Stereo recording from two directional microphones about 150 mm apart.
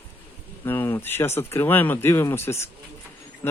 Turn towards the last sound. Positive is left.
turn(degrees=15)  # may be behind; listen again after turning